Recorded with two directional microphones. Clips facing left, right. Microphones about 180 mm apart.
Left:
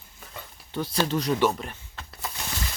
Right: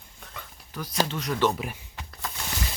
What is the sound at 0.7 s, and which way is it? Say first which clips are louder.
Speech: left 3 dB; 25° left (ahead or behind).